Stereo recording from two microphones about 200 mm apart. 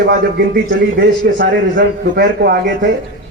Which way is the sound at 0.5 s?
60° right (ahead or behind).